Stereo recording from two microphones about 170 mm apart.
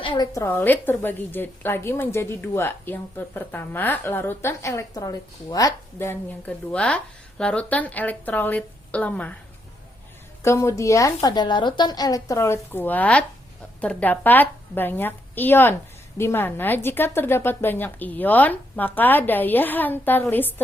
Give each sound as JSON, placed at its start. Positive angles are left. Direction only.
{"t": 0.0, "sound": "a woman's voice", "side_deg": 30}
{"t": 0.3, "sound": "a woman's voice", "side_deg": 10}
{"t": 10.4, "sound": "a woman's voice", "side_deg": 15}